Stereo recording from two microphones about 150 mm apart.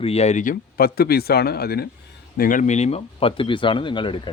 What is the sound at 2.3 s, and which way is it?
Speech, 65° left (ahead or behind).